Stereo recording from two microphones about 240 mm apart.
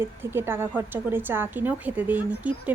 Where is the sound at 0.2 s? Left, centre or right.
Centre.